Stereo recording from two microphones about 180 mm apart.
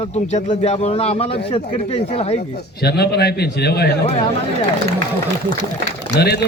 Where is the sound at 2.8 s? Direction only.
65° left (ahead or behind).